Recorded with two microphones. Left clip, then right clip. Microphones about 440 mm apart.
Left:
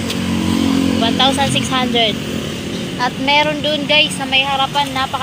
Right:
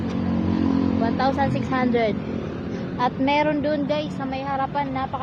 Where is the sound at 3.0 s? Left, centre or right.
Right.